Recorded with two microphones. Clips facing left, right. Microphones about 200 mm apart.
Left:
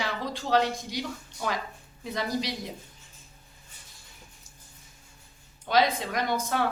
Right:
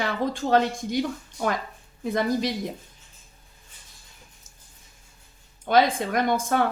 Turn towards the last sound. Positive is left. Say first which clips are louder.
# right 5 dB
turn(degrees=-50)  # may be behind; listen again after turning